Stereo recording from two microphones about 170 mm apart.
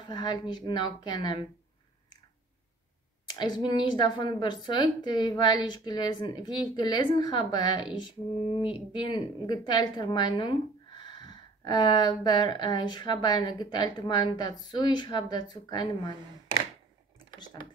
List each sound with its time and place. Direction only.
0.0 s a woman's voice: 25° left (ahead or behind)
3.3 s a woman's voice: 25° left (ahead or behind)